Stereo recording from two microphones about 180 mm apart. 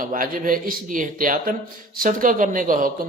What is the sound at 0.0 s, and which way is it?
A man's voice, 50° right (ahead or behind).